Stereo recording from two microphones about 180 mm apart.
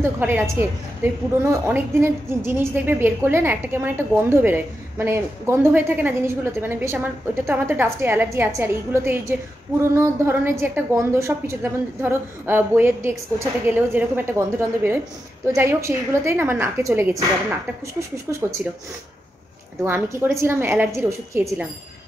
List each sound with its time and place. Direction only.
0.0 s a woman's voice: 10° right (ahead or behind)
15.4 s a woman's voice: 15° right (ahead or behind)
18.6 s a woman's voice: 10° right (ahead or behind)
19.8 s a woman's voice: 15° right (ahead or behind)